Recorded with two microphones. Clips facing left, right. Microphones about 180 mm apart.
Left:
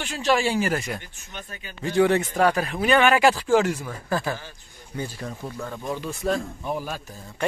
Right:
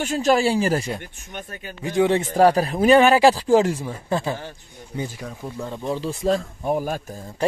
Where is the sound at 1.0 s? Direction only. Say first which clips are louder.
Right 4 dB; 50° right (ahead or behind).